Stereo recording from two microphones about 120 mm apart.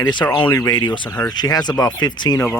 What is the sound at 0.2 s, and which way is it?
Frog, 25° left (ahead or behind).